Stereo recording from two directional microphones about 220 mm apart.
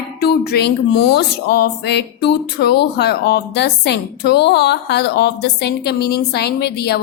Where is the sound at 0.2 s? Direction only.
50° left (ahead or behind).